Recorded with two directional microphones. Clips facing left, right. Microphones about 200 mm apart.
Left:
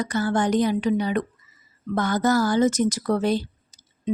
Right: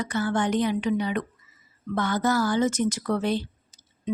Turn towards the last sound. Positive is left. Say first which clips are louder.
# left 4 dB
turn(degrees=40)  # may be behind; listen again after turning